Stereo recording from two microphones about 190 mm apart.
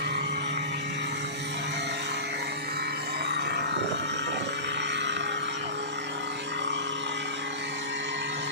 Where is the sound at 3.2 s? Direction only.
60° right (ahead or behind).